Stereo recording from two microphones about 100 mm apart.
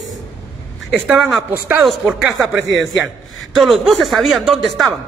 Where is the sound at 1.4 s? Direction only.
20° right (ahead or behind); by 4.9 s centre (ahead or behind).